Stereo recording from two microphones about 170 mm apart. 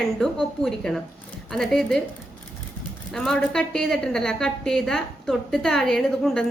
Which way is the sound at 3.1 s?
Centre (ahead or behind).